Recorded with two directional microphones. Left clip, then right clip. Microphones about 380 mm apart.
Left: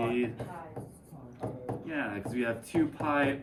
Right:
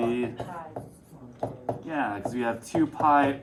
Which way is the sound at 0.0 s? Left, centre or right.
Centre.